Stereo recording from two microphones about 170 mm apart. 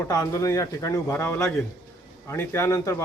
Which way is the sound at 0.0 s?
20° left (ahead or behind).